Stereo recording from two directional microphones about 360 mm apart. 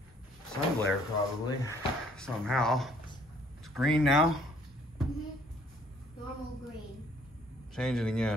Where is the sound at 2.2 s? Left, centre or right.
Centre.